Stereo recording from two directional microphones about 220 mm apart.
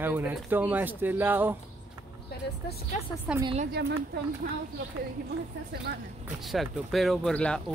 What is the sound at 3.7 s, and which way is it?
Speech, 50° right (ahead or behind).